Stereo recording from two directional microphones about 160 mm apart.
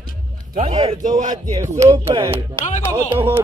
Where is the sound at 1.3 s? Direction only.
25° right (ahead or behind).